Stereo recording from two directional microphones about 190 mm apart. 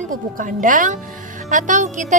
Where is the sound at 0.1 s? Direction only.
45° right (ahead or behind).